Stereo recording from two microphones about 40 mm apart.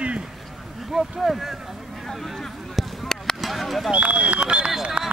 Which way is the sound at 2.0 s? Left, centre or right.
Centre.